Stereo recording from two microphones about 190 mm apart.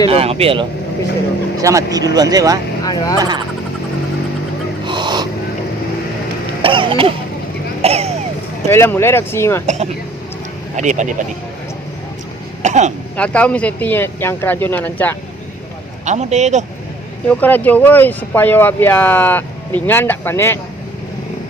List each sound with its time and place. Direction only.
0.1 s speech: 30° right (ahead or behind)
1.5 s speech: 15° right (ahead or behind)
2.8 s speech: 20° left (ahead or behind)
3.2 s speech: 20° right (ahead or behind)
4.9 s gasp: 25° right (ahead or behind)
6.6 s music: 25° right (ahead or behind)
7.8 s a sound: 35° right (ahead or behind)
8.7 s speech: 10° left (ahead or behind)
9.6 s speech: 35° right (ahead or behind)
12.6 s speech: 40° right (ahead or behind)
13.1 s speech: 5° left (ahead or behind)
16.0 s speech: 35° right (ahead or behind)
17.2 s speech: 10° left (ahead or behind)